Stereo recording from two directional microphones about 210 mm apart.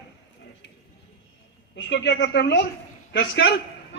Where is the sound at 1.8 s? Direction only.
55° left (ahead or behind).